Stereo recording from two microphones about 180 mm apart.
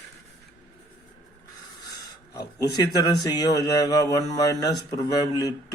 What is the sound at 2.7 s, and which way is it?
A man's voice, 20° left (ahead or behind).